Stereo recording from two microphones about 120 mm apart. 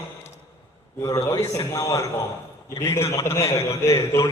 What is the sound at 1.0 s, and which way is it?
A man's voice, 30° left (ahead or behind).